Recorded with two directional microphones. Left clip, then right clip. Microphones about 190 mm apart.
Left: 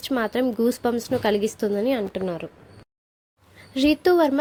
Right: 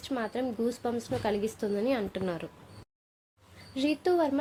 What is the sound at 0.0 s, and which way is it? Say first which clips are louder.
A woman's voice: left 9 dB; 35° left (ahead or behind).